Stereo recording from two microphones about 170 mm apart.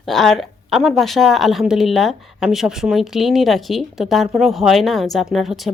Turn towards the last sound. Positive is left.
turn(degrees=0)  # may be behind; listen again after turning